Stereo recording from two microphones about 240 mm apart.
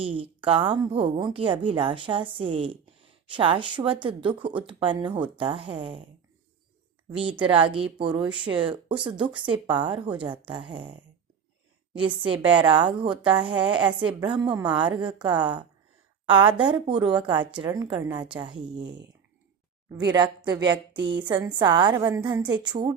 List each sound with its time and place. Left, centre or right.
0.0 s speech: right
7.3 s speech: right
19.9 s a woman's voice: centre